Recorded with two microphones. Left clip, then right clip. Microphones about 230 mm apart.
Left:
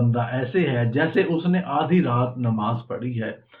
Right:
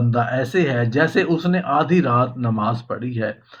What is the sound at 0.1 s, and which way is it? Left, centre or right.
Speech, right.